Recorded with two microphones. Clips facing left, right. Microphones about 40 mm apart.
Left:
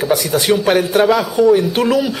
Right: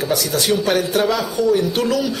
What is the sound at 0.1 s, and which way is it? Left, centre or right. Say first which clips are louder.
Speech: left 4 dB; left.